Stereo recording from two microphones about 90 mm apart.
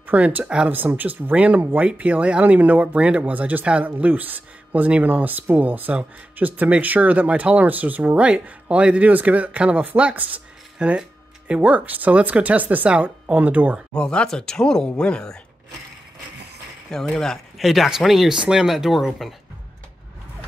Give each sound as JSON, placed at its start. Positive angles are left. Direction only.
{"t": 0.0, "sound": "speech", "side_deg": -15}
{"t": 13.9, "sound": "speech", "side_deg": 10}
{"t": 17.1, "sound": "speech", "side_deg": 5}